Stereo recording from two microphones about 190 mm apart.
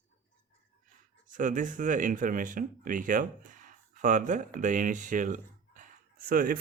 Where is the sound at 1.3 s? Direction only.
45° right (ahead or behind).